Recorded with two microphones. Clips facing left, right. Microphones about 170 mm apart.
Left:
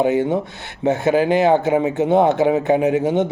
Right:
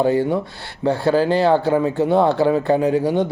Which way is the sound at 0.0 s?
20° left (ahead or behind).